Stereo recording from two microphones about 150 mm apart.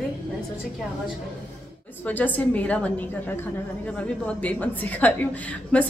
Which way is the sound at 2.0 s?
10° left (ahead or behind).